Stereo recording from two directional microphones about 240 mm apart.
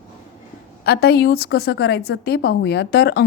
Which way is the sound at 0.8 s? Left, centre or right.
Left.